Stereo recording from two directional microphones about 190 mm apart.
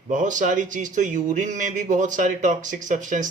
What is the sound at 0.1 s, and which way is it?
Speech, 40° right (ahead or behind).